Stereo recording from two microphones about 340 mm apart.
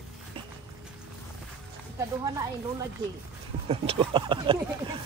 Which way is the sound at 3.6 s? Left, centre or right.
Centre.